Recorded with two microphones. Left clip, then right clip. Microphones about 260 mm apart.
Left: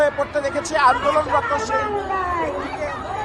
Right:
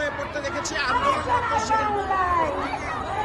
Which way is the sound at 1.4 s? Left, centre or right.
Right.